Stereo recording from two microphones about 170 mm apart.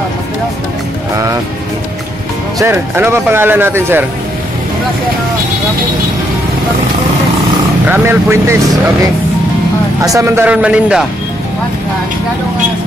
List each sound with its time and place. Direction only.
2.6 s speech: 15° right (ahead or behind)
7.9 s speech: 15° right (ahead or behind)
10.0 s speech: 15° right (ahead or behind)